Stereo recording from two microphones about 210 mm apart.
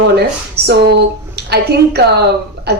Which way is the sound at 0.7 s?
50° right (ahead or behind).